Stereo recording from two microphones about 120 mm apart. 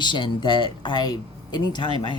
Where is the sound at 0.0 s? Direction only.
40° left (ahead or behind).